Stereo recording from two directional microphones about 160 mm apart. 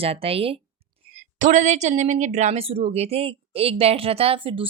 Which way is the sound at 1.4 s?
50° right (ahead or behind).